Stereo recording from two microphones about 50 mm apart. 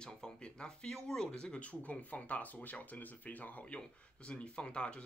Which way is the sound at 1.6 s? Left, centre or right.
Left.